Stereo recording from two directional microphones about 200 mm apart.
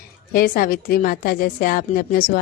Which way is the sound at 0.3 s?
45° left (ahead or behind).